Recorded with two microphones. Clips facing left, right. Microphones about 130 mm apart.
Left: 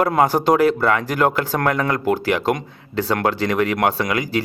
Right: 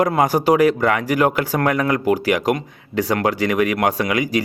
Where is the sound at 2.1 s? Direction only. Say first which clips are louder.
Right 1 dB; 10° right (ahead or behind).